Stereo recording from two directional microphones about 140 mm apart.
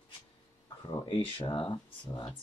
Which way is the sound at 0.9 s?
35° left (ahead or behind).